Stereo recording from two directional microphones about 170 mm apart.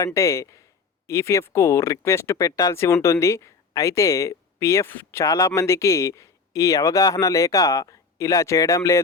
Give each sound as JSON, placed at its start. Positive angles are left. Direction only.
{"t": 0.0, "sound": "speech", "side_deg": 20}